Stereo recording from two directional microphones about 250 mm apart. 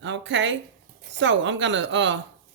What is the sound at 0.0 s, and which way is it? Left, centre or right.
A man's voice, right.